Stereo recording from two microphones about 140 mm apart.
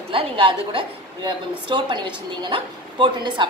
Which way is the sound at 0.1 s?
35° right (ahead or behind).